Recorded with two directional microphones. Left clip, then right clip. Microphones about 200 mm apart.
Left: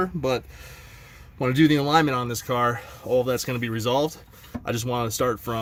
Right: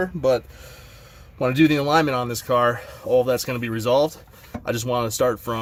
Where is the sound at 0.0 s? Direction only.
40° left (ahead or behind).